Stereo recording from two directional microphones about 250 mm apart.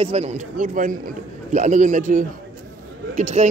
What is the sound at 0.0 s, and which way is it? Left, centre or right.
A man's voice, right.